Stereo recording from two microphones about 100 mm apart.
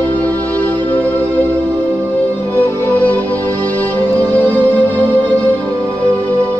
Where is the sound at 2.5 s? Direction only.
20° left (ahead or behind).